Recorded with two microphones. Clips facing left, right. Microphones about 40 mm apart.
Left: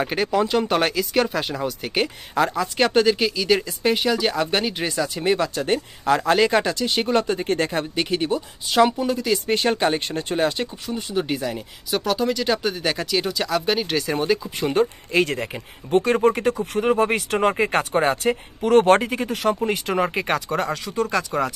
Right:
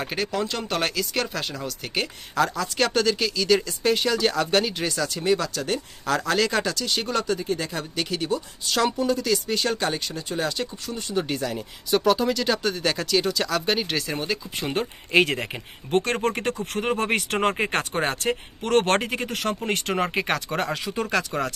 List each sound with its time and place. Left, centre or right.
0.0 s speech: centre
7.3 s speech: left
7.9 s speech: left
9.3 s speech: left
10.9 s speech: centre
16.0 s speech: centre